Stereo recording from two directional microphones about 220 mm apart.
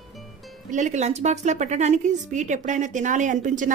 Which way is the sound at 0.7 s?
35° right (ahead or behind).